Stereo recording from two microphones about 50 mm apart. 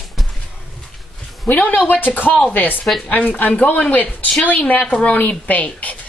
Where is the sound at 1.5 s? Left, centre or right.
Left.